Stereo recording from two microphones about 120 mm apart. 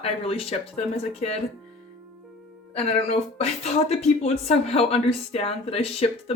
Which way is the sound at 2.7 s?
60° left (ahead or behind).